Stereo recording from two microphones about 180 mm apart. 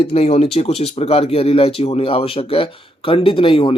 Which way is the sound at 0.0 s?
35° left (ahead or behind).